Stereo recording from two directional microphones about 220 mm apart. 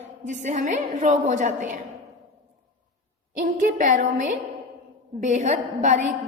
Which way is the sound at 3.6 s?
35° right (ahead or behind).